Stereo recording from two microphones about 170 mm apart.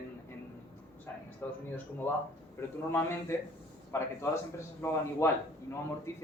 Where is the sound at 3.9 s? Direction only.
15° left (ahead or behind).